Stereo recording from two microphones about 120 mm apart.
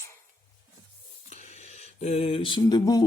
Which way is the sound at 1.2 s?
85° left.